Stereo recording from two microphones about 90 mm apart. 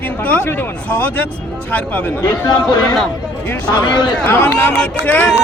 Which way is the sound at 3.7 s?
60° left (ahead or behind).